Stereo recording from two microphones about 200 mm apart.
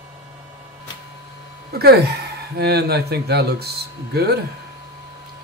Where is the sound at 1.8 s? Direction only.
55° right (ahead or behind).